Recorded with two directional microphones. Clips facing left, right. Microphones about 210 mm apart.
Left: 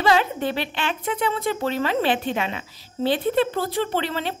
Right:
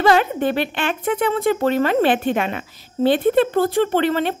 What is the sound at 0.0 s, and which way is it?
A woman's voice, 55° right (ahead or behind).